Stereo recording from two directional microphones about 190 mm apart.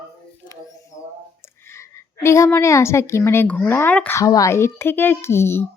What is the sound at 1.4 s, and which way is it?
A woman's voice, 15° left (ahead or behind).